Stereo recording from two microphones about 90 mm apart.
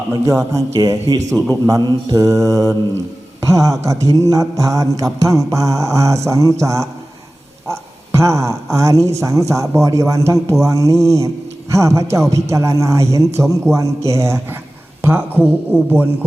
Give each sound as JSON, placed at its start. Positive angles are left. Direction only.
{"t": 0.1, "sound": "mantra", "side_deg": -35}
{"t": 7.7, "sound": "a sound", "side_deg": -35}
{"t": 8.7, "sound": "mantra", "side_deg": -35}
{"t": 15.0, "sound": "speech", "side_deg": -25}